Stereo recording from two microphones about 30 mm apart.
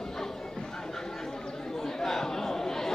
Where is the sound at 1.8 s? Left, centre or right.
Centre.